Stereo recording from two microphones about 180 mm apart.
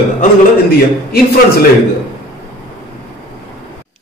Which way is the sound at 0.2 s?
55° left (ahead or behind).